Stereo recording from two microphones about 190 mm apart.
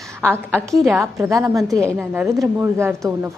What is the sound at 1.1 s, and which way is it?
Speech, 15° right (ahead or behind).